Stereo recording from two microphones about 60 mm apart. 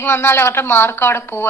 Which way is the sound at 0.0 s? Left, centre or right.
Left.